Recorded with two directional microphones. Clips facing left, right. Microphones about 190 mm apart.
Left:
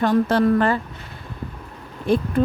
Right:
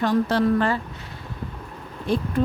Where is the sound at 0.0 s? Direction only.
55° left (ahead or behind).